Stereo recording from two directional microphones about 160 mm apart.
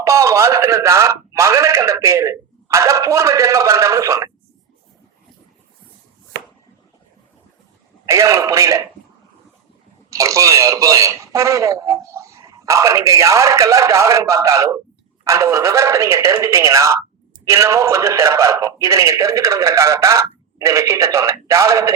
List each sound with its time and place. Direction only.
0.0 s speech: 20° right (ahead or behind)
8.0 s speech: 20° right (ahead or behind)
10.1 s speech: 20° right (ahead or behind)